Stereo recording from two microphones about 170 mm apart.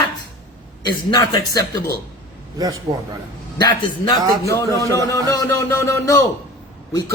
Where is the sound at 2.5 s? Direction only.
20° right (ahead or behind).